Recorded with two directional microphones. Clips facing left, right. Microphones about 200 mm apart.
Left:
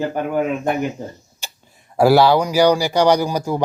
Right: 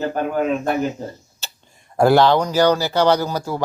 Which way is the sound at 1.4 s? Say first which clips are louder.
Left 2 dB; 10° left (ahead or behind).